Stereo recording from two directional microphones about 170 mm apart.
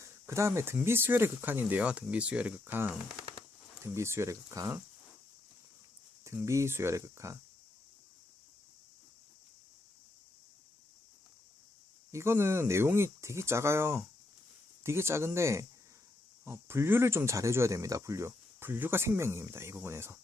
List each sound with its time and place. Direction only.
0.0 s speech: 15° right (ahead or behind)
6.2 s speech: 15° right (ahead or behind)
12.1 s speech: 15° right (ahead or behind)